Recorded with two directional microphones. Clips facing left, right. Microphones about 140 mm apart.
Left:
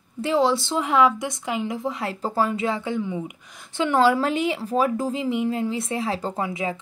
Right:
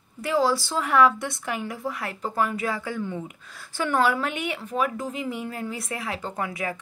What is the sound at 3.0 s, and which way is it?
Speech, 10° left (ahead or behind).